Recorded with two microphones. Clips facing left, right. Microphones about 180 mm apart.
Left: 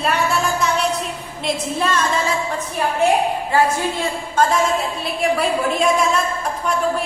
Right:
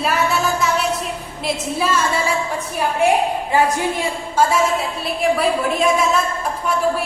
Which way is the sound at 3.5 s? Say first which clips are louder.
Right 1 dB; 15° right (ahead or behind).